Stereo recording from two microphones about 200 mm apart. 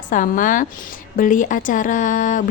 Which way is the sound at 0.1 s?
40° left (ahead or behind).